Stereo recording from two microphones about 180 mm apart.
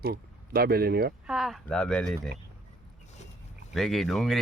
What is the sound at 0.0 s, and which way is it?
Speech, 60° right (ahead or behind).